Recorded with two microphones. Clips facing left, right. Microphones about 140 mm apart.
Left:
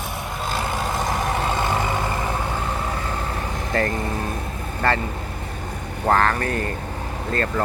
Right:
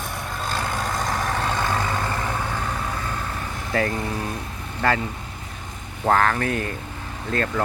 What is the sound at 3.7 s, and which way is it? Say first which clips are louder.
Speech: even; 5° right (ahead or behind).